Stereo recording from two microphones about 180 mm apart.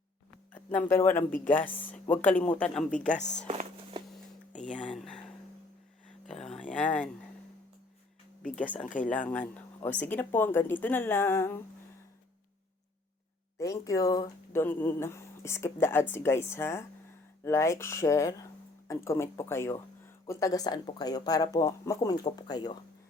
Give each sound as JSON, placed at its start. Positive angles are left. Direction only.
{"t": 0.5, "sound": "speech", "side_deg": 10}
{"t": 3.4, "sound": "speech", "side_deg": -40}
{"t": 3.9, "sound": "music", "side_deg": -25}
{"t": 4.6, "sound": "a sound", "side_deg": 5}
{"t": 6.2, "sound": "a sound", "side_deg": 5}
{"t": 8.6, "sound": "speech", "side_deg": 10}
{"t": 13.6, "sound": "speech", "side_deg": 20}